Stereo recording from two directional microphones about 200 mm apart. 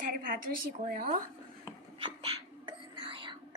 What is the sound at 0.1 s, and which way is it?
A woman's voice, 45° right (ahead or behind).